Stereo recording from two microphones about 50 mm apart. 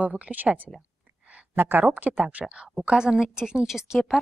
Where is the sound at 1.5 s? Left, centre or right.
Right.